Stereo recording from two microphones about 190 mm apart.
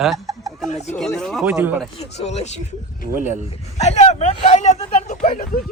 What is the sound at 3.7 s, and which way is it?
Speech, 35° left (ahead or behind).